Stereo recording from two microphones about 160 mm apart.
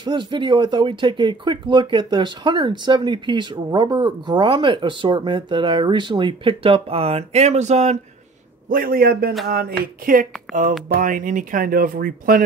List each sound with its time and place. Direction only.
0.0 s speech: 30° right (ahead or behind); by 8.0 s 45° right (ahead or behind)
8.6 s speech: 60° right (ahead or behind)
10.5 s speech: centre (ahead or behind)
11.0 s speech: 60° right (ahead or behind)